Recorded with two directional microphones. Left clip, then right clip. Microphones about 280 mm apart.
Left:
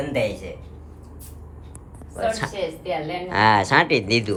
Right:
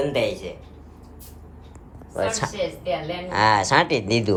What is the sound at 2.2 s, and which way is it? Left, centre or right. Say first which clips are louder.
Speech: left 1 dB; right.